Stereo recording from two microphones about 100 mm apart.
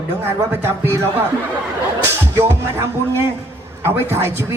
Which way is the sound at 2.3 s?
25° right (ahead or behind).